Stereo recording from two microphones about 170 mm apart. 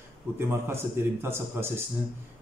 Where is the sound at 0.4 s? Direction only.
15° right (ahead or behind).